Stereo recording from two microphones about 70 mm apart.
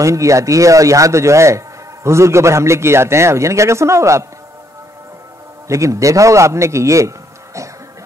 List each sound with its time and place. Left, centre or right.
0.0 s a man's voice: right
5.7 s a man's voice: right